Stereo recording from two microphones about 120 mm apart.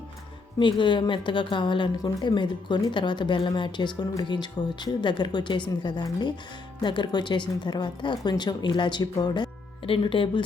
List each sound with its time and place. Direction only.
0.6 s speech: 40° left (ahead or behind)